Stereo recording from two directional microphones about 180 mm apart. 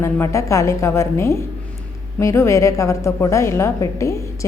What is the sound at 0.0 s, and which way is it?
A woman's voice, 15° left (ahead or behind).